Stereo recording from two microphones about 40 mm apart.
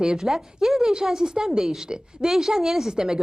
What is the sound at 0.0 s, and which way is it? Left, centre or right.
A woman's voice, centre.